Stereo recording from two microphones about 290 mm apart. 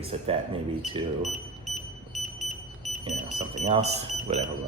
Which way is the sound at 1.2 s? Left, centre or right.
Centre.